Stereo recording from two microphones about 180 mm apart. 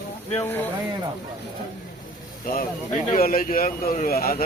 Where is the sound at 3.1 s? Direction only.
50° left (ahead or behind).